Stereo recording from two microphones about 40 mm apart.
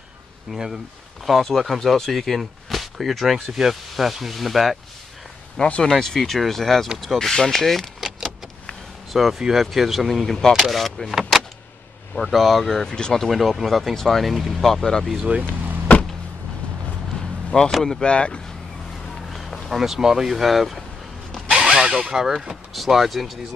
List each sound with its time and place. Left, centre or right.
0.5 s speech: centre
1.2 s speech: centre
5.8 s speech: centre
9.1 s speech: centre
12.8 s speech: centre
13.3 s speech: centre
15.2 s speech: right
17.5 s speech: centre
19.3 s speech: centre
21.5 s a sound: right
22.1 s speech: centre
22.5 s speech: centre